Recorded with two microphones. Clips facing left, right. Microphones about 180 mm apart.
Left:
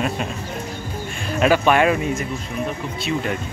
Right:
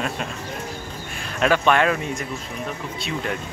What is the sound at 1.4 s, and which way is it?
Speech, 10° left (ahead or behind).